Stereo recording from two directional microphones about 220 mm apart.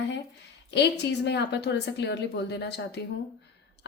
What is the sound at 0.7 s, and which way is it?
A woman's voice, 50° left (ahead or behind).